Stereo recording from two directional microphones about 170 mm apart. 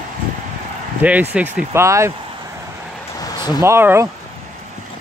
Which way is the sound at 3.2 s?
25° left (ahead or behind).